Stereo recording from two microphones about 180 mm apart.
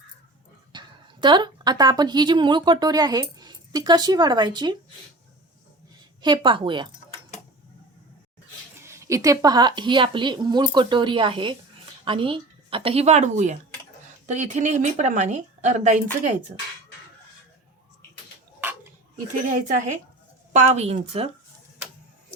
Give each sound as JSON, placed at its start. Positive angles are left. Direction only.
{"t": 0.7, "sound": "a woman's voice", "side_deg": -25}
{"t": 6.2, "sound": "a woman's voice", "side_deg": -25}
{"t": 8.8, "sound": "a woman's voice", "side_deg": -15}
{"t": 19.1, "sound": "a woman's voice", "side_deg": -45}